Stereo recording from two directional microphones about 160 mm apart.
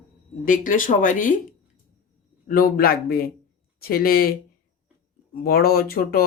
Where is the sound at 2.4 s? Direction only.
65° left (ahead or behind).